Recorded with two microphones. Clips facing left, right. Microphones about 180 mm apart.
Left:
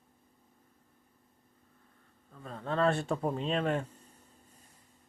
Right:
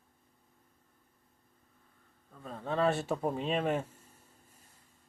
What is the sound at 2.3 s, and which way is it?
Speech, 5° right (ahead or behind).